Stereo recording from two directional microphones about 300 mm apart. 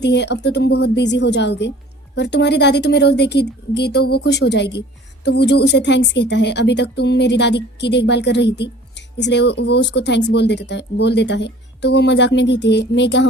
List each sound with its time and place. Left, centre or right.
0.0 s speech: left